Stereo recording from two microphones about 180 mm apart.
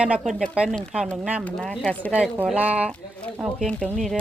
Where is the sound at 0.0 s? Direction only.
5° right (ahead or behind).